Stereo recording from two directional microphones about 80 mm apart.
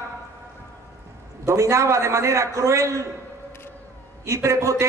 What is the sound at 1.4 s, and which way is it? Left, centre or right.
A man's voice, right.